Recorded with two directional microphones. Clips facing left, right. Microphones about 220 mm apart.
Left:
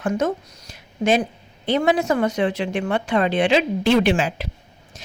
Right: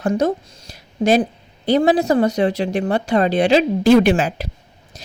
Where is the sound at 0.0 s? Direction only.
35° right (ahead or behind).